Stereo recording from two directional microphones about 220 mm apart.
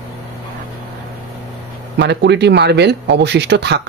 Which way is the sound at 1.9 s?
50° right (ahead or behind).